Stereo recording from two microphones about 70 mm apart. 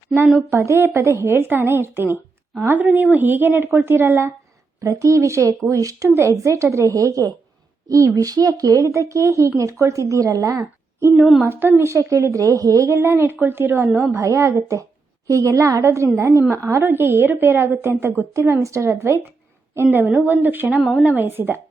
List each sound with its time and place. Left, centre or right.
0.5 s speech: right
0.8 s a woman's voice: right
4.8 s a woman's voice: right
11.2 s child singing: centre
11.4 s a woman's voice: right
11.8 s speech: right
12.9 s a woman's voice: right
14.1 s speech: right
15.8 s a woman's voice: right